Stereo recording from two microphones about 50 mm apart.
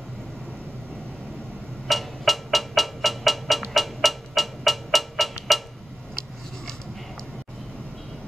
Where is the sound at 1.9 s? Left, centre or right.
Centre.